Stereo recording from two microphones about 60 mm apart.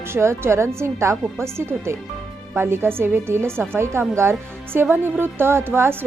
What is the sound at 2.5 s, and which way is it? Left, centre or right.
A woman's voice, right.